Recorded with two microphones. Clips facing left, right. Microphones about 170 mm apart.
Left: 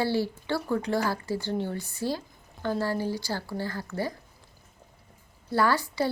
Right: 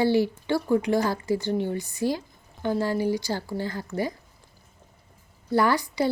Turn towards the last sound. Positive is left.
turn(degrees=-15)  # may be behind; listen again after turning